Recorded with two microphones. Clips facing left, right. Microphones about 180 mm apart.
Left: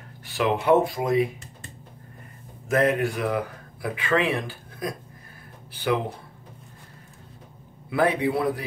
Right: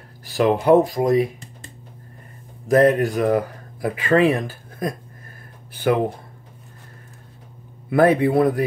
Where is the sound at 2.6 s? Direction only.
35° right (ahead or behind).